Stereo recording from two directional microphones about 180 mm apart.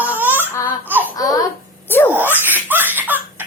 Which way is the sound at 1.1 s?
20° left (ahead or behind).